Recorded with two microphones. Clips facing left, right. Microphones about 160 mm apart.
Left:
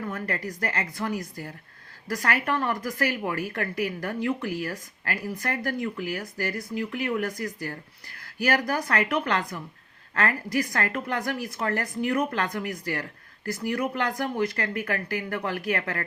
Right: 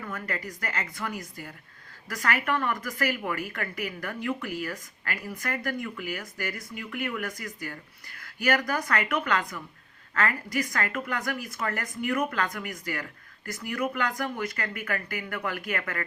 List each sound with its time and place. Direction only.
0.1 s a woman's voice: 35° left (ahead or behind)